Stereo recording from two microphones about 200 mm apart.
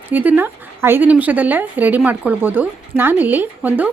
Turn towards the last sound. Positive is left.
turn(degrees=-10)  # may be behind; listen again after turning